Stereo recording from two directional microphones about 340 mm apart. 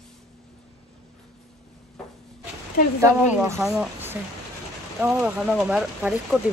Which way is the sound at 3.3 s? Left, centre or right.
Centre.